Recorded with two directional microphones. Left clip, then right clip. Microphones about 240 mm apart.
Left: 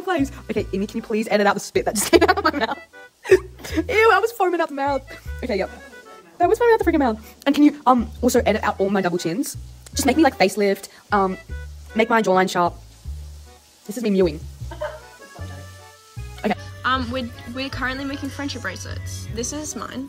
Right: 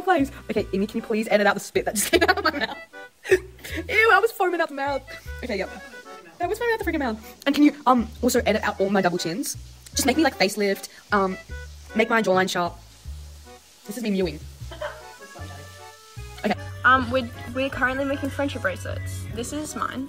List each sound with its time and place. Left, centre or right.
0.0 s a woman's voice: centre
13.9 s speech: left
16.3 s a woman's voice: centre